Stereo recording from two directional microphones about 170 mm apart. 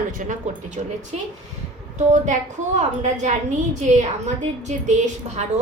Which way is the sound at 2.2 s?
45° right (ahead or behind).